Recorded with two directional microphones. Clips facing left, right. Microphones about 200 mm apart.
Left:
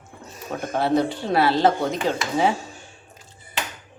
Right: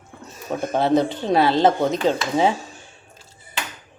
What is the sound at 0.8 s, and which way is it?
Speech, 20° right (ahead or behind).